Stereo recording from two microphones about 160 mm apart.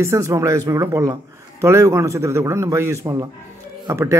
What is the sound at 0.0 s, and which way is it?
A man's voice, 20° right (ahead or behind).